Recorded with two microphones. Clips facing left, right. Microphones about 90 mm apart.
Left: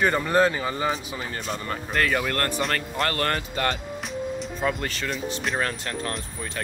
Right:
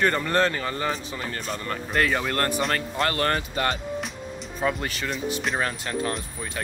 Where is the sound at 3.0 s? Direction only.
15° right (ahead or behind).